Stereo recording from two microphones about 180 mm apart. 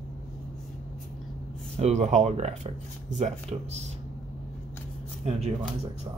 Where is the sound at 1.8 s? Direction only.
40° right (ahead or behind).